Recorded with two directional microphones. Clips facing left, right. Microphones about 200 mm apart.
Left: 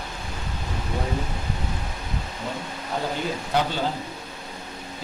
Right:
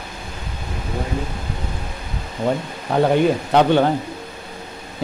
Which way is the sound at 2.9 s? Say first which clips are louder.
Right 12 dB; 65° right (ahead or behind).